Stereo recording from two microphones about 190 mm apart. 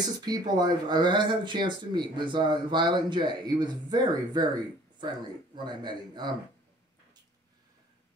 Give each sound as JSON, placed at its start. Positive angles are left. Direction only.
{"t": 0.0, "sound": "speech", "side_deg": -20}
{"t": 5.6, "sound": "speech", "side_deg": -25}